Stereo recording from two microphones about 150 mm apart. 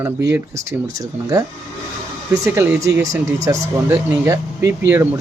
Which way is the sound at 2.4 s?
20° right (ahead or behind).